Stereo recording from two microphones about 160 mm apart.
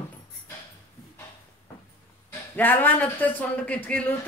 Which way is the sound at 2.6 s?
10° left (ahead or behind).